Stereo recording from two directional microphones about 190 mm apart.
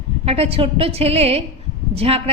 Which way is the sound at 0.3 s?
30° right (ahead or behind).